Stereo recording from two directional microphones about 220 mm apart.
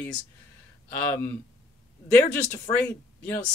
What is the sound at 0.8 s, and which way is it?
Speech, 10° left (ahead or behind).